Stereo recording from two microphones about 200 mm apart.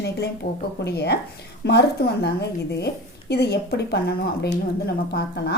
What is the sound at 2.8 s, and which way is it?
A woman's voice, 55° left (ahead or behind).